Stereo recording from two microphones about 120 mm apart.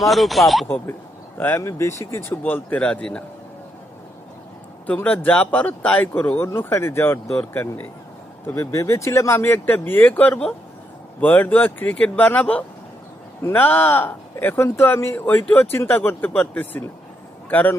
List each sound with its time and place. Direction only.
0.0 s speech: centre (ahead or behind)
1.4 s speech: 20° left (ahead or behind)
4.9 s speech: 15° left (ahead or behind)